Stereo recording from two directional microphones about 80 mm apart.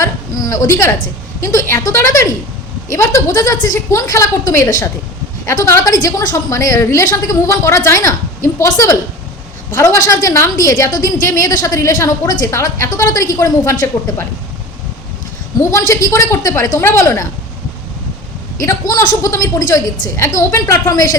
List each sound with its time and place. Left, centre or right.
0.0 s a sound: left
1.4 s a woman's voice: left
15.5 s a woman's voice: left
18.6 s a man's voice: left